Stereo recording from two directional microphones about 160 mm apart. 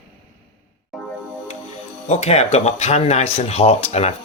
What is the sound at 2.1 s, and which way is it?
Speech, 45° left (ahead or behind).